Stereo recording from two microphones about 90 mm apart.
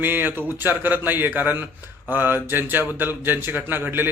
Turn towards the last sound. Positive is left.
turn(degrees=-25)  # may be behind; listen again after turning